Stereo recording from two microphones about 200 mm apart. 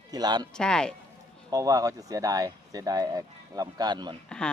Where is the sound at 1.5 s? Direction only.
15° right (ahead or behind).